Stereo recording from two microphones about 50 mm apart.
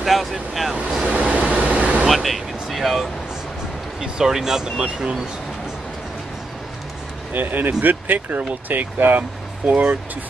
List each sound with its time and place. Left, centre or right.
0.0 s speech: centre
1.0 s vehicle: right
2.0 s vehicle: centre
4.0 s speech: centre
7.3 s speech: right